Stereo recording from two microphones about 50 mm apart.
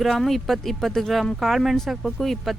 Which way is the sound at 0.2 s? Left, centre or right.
Centre.